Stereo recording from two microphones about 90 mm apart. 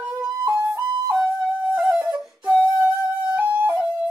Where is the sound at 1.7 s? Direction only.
10° right (ahead or behind).